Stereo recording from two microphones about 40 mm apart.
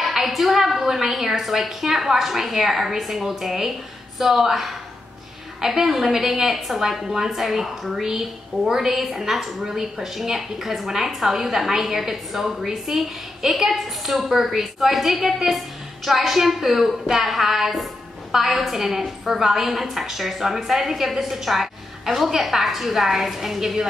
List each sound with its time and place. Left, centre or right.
0.0 s a woman's voice: centre